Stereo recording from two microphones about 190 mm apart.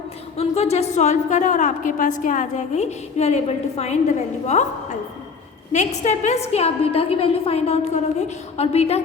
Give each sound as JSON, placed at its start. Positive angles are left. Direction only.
{"t": 0.3, "sound": "a woman's voice", "side_deg": 35}
{"t": 5.7, "sound": "a woman's voice", "side_deg": 35}